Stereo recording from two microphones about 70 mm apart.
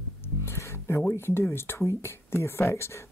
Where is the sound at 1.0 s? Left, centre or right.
Left.